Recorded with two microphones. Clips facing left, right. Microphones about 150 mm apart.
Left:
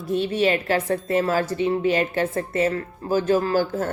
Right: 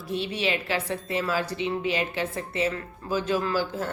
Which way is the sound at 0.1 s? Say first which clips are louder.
Left 7 dB; 45° left (ahead or behind).